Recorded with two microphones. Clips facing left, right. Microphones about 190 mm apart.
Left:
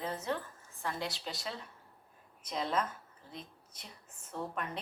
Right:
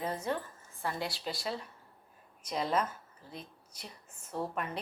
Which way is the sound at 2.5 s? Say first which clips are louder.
Right 2 dB; 5° right (ahead or behind).